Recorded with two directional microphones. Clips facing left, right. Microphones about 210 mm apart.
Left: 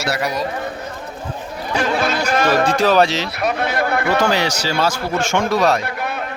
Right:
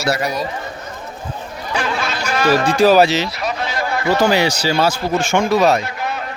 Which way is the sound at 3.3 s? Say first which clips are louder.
Left 3 dB; 60° left (ahead or behind).